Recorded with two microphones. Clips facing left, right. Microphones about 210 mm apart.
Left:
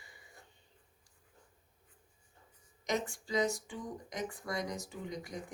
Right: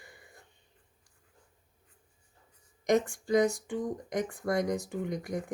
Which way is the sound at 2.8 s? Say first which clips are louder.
Right 9 dB; 50° right (ahead or behind).